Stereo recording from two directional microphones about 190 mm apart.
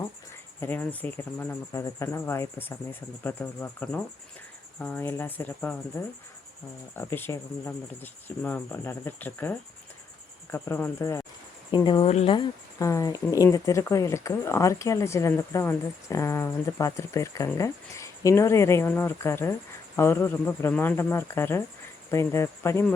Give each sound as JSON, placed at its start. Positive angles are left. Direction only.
{"t": 0.6, "sound": "speech", "side_deg": 10}
{"t": 6.9, "sound": "speech", "side_deg": 10}